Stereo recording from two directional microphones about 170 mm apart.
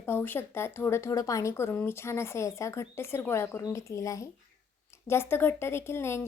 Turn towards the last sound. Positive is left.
turn(degrees=15)  # may be behind; listen again after turning